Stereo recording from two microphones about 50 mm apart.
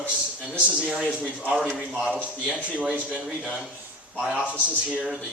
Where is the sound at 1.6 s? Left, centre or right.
Centre.